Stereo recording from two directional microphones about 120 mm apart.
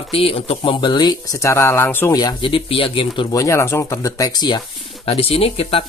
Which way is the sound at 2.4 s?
50° left (ahead or behind).